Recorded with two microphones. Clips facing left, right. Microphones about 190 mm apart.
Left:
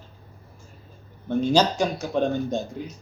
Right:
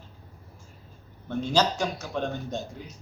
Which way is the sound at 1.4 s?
15° left (ahead or behind).